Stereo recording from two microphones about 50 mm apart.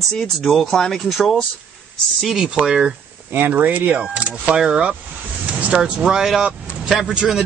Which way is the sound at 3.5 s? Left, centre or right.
Right.